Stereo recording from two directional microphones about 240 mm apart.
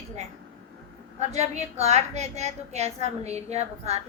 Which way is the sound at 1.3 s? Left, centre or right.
Right.